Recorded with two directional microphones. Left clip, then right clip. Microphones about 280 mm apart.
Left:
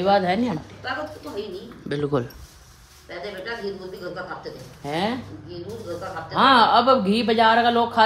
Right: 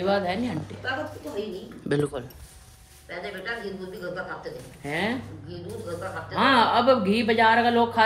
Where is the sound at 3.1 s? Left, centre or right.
Centre.